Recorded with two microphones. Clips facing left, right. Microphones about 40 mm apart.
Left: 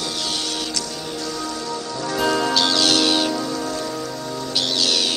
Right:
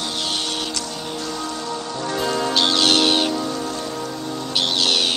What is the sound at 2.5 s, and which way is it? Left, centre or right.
Music, right.